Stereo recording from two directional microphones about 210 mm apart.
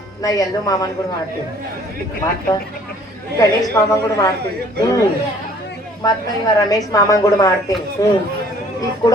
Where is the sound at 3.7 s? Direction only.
15° left (ahead or behind).